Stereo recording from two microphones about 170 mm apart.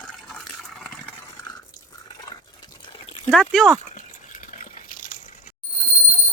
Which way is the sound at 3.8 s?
45° left (ahead or behind).